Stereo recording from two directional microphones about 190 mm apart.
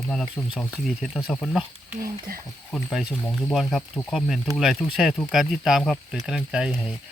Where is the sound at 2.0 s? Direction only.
50° right (ahead or behind).